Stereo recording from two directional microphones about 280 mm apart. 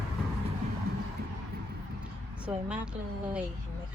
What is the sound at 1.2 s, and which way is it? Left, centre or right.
Vehicle, right.